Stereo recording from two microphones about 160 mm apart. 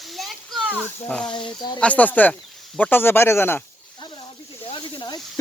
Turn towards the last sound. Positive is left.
turn(degrees=30)  # may be behind; listen again after turning